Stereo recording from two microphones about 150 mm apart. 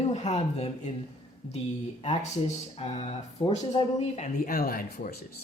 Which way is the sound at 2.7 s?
45° left (ahead or behind).